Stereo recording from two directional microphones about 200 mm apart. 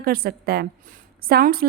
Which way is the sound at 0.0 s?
50° right (ahead or behind).